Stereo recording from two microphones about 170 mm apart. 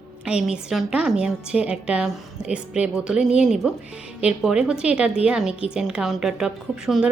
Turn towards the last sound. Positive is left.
turn(degrees=-5)  # may be behind; listen again after turning